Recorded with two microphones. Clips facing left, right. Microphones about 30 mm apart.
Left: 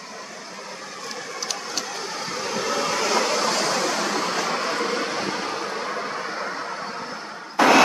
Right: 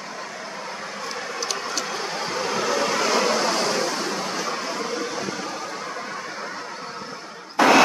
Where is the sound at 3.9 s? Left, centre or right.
Left.